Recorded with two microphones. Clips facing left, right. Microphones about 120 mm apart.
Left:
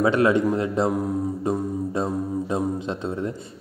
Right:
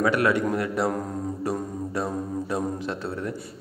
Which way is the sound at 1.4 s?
20° left (ahead or behind).